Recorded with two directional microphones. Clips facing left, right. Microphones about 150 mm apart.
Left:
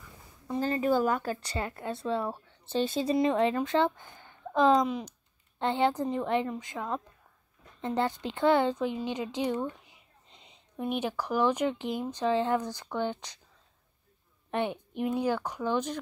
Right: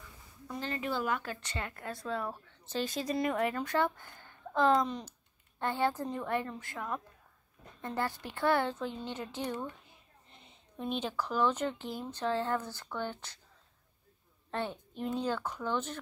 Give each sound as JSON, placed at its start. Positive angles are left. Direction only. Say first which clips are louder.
{"t": 0.6, "sound": "speech", "louder": "left 9 dB", "side_deg": 40}
{"t": 5.6, "sound": "speech", "louder": "left 5 dB", "side_deg": 20}
{"t": 14.5, "sound": "a woman's voice", "louder": "left 6 dB", "side_deg": 20}